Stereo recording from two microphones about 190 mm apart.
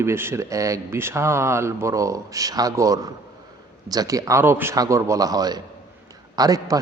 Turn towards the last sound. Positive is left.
turn(degrees=-20)  # may be behind; listen again after turning